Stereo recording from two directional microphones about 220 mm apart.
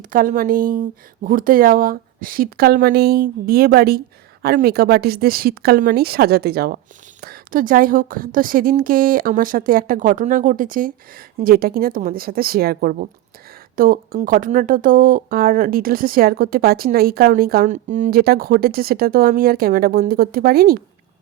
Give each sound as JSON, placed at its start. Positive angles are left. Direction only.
{"t": 0.1, "sound": "speech", "side_deg": -40}